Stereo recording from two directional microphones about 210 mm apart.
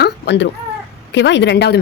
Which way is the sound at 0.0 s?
55° left (ahead or behind).